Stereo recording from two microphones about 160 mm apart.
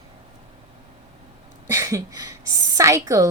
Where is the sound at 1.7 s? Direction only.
20° right (ahead or behind).